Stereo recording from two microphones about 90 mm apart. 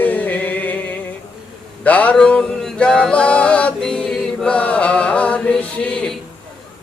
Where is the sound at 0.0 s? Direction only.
20° left (ahead or behind).